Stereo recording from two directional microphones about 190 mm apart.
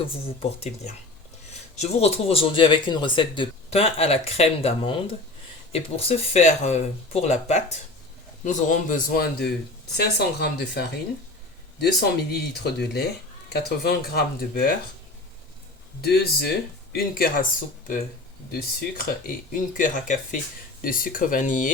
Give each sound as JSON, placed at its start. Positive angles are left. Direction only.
{"t": 0.1, "sound": "speech", "side_deg": 30}
{"t": 1.7, "sound": "a man's voice", "side_deg": 35}
{"t": 16.0, "sound": "speech", "side_deg": 55}
{"t": 18.5, "sound": "a man's voice", "side_deg": 50}